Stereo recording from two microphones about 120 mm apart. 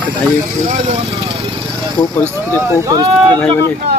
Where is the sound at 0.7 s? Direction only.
90° right.